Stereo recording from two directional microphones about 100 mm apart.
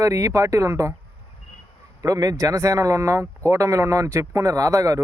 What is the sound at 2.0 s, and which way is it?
Speech, 35° right (ahead or behind).